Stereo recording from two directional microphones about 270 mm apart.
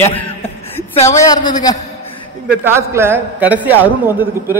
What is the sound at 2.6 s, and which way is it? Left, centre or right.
A man's voice, centre.